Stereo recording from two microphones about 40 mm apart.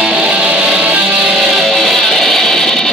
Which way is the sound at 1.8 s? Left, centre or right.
Centre.